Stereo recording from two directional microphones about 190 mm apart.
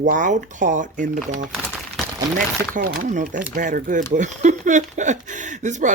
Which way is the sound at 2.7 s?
45° right (ahead or behind).